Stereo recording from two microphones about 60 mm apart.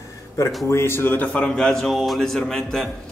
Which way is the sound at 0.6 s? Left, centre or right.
Left.